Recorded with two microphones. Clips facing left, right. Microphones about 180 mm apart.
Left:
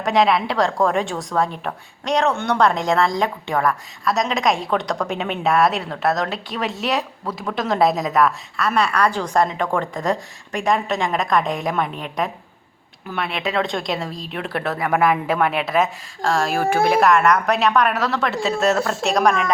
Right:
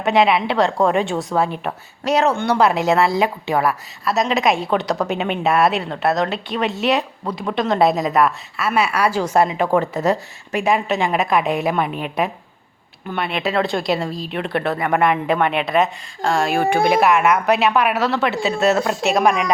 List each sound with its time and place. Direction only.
0.0 s speech: centre (ahead or behind)